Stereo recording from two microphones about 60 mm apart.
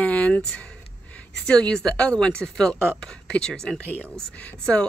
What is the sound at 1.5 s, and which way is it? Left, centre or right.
A woman's voice, centre.